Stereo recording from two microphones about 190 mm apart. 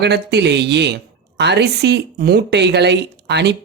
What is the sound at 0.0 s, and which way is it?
Speech, 60° right (ahead or behind).